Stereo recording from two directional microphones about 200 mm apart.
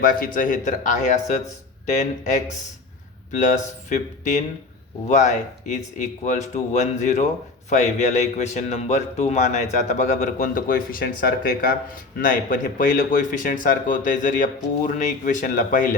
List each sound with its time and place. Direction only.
0.0 s a man's voice: 45° left (ahead or behind)